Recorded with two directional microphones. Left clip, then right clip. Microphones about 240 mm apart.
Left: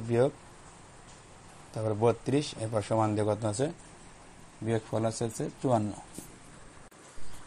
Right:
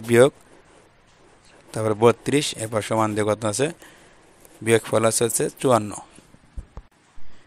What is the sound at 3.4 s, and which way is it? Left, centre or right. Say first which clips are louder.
Speech: right 8 dB; right.